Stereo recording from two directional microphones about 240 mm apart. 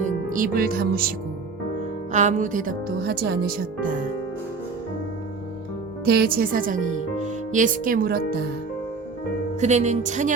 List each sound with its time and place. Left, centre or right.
0.0 s speech: right
2.1 s a woman's voice: right
6.1 s a woman's voice: right
9.6 s speech: right